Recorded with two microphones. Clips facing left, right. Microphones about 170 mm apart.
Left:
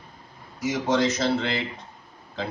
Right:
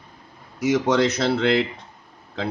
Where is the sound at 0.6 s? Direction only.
70° right (ahead or behind).